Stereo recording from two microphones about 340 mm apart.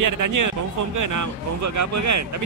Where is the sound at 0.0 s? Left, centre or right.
Right.